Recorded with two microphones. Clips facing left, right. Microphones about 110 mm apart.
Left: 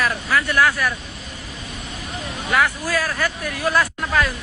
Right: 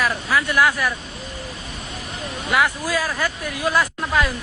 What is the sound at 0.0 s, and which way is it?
Speech, 10° right (ahead or behind).